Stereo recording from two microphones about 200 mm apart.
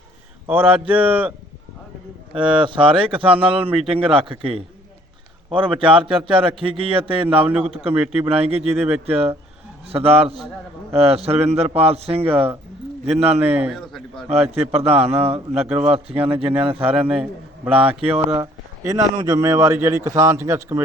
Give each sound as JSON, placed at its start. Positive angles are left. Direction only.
{"t": 0.4, "sound": "a man's voice", "side_deg": -10}
{"t": 2.3, "sound": "speech", "side_deg": -25}
{"t": 5.5, "sound": "a man's voice", "side_deg": -5}
{"t": 5.8, "sound": "a man's voice", "side_deg": -25}
{"t": 13.4, "sound": "a man's voice", "side_deg": -10}
{"t": 14.3, "sound": "a man's voice", "side_deg": -30}
{"t": 16.9, "sound": "a man's voice", "side_deg": -5}
{"t": 17.7, "sound": "speech", "side_deg": -30}
{"t": 18.8, "sound": "a man's voice", "side_deg": -15}